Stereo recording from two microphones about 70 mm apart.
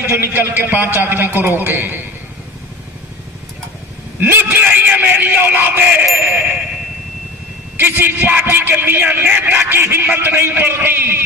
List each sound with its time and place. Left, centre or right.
0.2 s a man's voice: right
4.2 s a man's voice: right
7.7 s a man's voice: right